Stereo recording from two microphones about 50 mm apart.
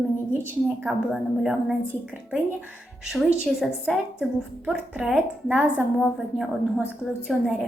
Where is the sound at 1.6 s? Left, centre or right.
Right.